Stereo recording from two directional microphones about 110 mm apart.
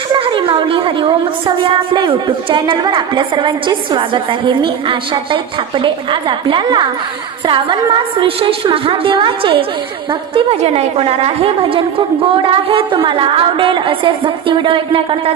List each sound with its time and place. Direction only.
0.2 s a woman's voice: 50° right (ahead or behind)
10.6 s a woman's voice: 70° right (ahead or behind); by 15.3 s 55° right (ahead or behind)